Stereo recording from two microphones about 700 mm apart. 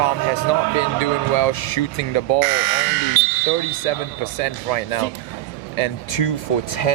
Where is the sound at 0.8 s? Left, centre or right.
Left.